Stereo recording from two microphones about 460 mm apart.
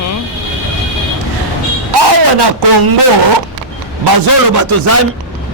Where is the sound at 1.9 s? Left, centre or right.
Right.